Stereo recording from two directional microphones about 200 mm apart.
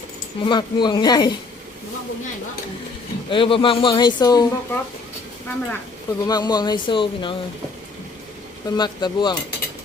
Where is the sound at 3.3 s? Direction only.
25° left (ahead or behind).